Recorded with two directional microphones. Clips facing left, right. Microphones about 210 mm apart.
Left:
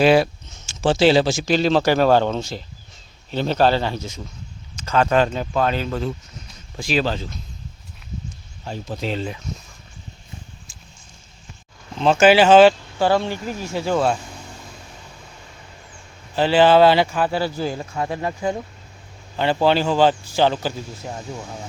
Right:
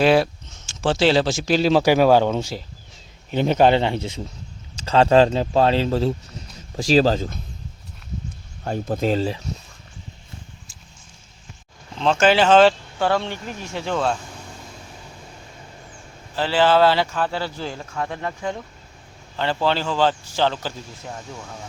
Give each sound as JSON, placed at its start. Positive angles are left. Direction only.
{"t": 0.0, "sound": "speech", "side_deg": 0}
{"t": 8.6, "sound": "speech", "side_deg": -55}
{"t": 11.9, "sound": "speech", "side_deg": 10}
{"t": 16.3, "sound": "speech", "side_deg": 15}